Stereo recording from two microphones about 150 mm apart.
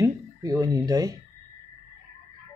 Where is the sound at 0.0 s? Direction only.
25° right (ahead or behind).